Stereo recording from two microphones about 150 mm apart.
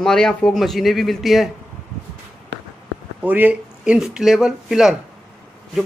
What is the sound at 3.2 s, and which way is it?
Speech, 10° right (ahead or behind).